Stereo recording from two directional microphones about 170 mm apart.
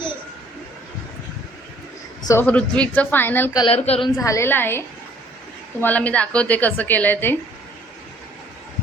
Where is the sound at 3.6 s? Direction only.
35° left (ahead or behind).